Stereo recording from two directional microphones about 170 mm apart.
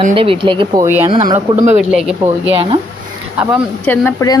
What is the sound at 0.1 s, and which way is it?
Speech, 30° right (ahead or behind).